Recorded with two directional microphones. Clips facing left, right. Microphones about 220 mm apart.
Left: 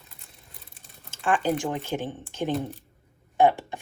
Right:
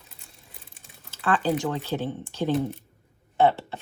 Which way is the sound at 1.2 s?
15° left (ahead or behind).